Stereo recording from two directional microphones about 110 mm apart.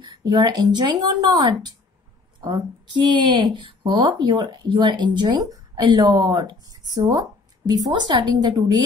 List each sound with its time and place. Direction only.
0.0 s a woman's voice: 40° right (ahead or behind)